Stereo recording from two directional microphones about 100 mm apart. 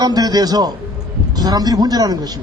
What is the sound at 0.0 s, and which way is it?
A man's voice, 40° right (ahead or behind).